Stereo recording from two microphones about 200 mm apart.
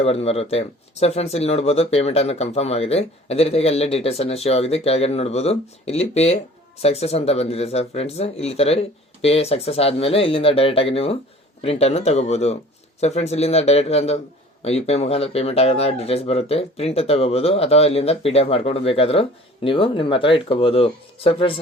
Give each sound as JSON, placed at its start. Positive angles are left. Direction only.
{"t": 0.0, "sound": "speech", "side_deg": 30}